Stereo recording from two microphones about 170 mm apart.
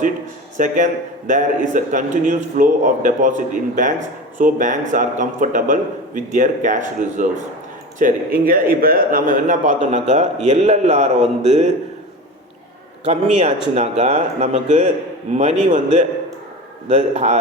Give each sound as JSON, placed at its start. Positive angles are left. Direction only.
{"t": 0.5, "sound": "a man's voice", "side_deg": -50}
{"t": 13.1, "sound": "a man's voice", "side_deg": -40}